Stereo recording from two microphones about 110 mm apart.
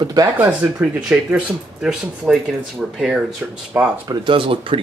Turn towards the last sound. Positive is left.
turn(degrees=-55)  # may be behind; listen again after turning